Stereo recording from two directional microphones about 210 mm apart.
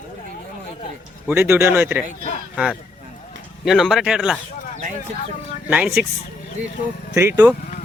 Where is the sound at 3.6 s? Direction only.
Centre (ahead or behind).